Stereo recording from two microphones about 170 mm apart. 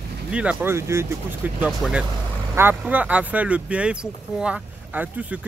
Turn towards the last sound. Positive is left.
turn(degrees=-10)  # may be behind; listen again after turning